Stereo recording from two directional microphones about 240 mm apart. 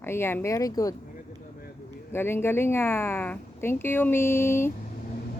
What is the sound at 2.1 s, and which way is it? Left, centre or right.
A woman's voice, centre.